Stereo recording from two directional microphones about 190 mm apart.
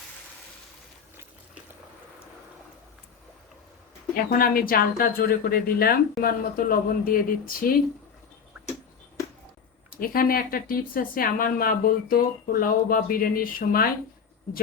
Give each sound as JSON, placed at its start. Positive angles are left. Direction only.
{"t": 4.3, "sound": "speech", "side_deg": 50}
{"t": 10.0, "sound": "speech", "side_deg": 50}